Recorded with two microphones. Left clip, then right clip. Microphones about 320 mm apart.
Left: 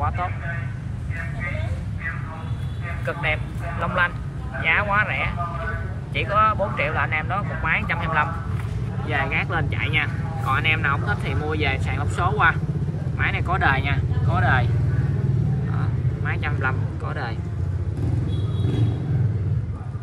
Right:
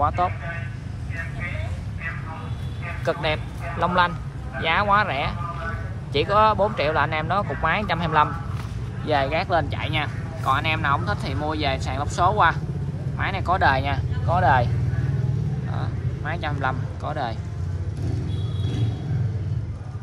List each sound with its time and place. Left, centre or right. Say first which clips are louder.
3.1 s speech: right 1 dB; centre
15.8 s vehicle: left 2 dB; centre